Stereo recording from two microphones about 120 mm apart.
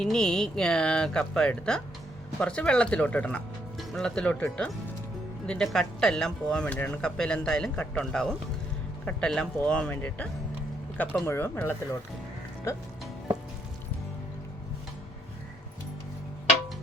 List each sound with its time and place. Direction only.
0.0 s speech: 5° left (ahead or behind)
11.3 s speech: 20° left (ahead or behind)